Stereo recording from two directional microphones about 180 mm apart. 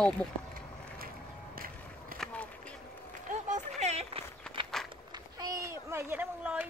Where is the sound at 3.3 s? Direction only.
40° right (ahead or behind).